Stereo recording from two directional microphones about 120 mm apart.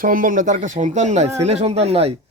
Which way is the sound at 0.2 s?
90° right.